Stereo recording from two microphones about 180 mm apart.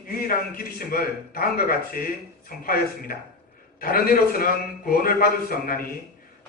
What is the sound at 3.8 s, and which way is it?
A man's voice, 55° left (ahead or behind).